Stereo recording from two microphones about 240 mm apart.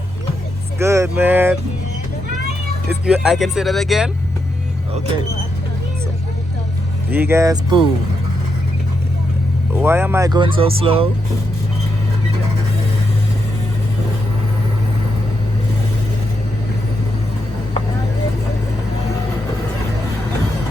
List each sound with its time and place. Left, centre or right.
0.8 s speech: centre
3.1 s speech: centre
7.1 s speech: centre
9.7 s speech: centre